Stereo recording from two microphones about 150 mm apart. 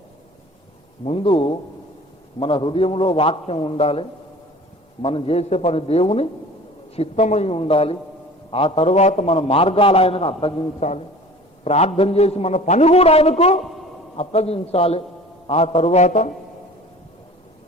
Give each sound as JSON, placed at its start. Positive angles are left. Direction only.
{"t": 1.0, "sound": "a man's voice", "side_deg": 40}
{"t": 5.0, "sound": "a man's voice", "side_deg": 40}